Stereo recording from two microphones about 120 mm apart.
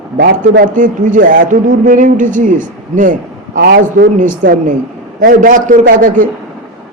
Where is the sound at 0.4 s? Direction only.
90° right.